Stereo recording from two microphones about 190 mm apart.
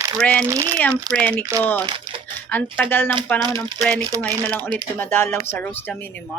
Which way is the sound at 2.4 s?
10° left (ahead or behind).